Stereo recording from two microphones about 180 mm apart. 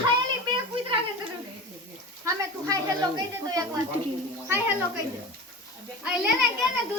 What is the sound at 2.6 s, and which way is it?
Speech, 20° right (ahead or behind).